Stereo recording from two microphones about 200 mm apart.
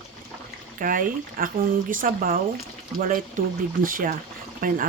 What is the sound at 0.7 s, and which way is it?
Speech, 45° right (ahead or behind).